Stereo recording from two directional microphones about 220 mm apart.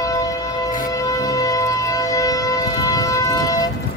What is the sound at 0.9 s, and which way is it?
Music, 15° left (ahead or behind).